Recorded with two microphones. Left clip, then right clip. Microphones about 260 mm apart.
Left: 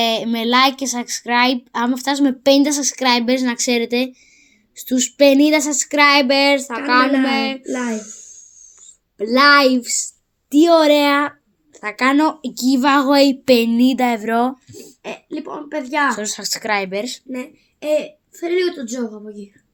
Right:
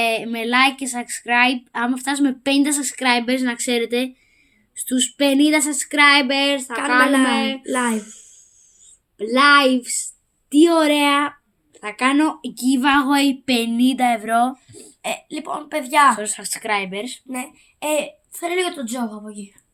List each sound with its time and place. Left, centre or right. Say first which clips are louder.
0.0 s a woman's voice: left 2 dB; centre
7.7 s a woman's voice: right 2 dB; right
9.1 s a woman's voice: left 2 dB; centre
15.0 s a woman's voice: right 2 dB; right
16.1 s a woman's voice: left 3 dB; centre
17.3 s a woman's voice: left 1 dB; right